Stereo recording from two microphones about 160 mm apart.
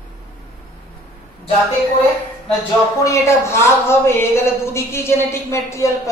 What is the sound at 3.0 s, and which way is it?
Speech, 20° left (ahead or behind).